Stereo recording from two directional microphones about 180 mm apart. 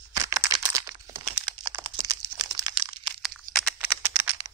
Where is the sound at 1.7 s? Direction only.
20° right (ahead or behind).